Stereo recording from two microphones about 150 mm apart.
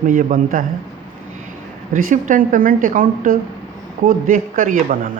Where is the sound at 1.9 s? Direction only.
65° right (ahead or behind).